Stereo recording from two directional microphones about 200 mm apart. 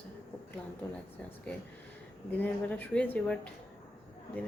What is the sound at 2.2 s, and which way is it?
A woman's voice, 10° left (ahead or behind).